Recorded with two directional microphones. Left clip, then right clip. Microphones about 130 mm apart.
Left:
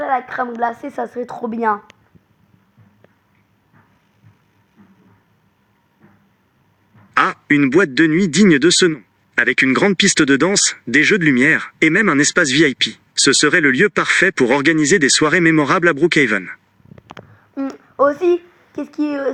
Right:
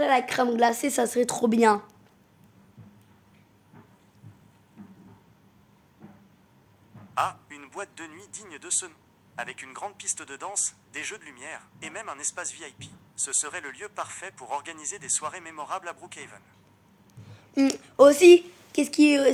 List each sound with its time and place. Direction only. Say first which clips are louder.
0.0 s a woman's voice: left 3 dB; 20° right (ahead or behind)
0.4 s a woman's voice: left 1 dB; 35° right (ahead or behind)
7.1 s a man's voice: left 14 dB; 40° right (ahead or behind)
17.3 s speech: right 2 dB; 20° right (ahead or behind)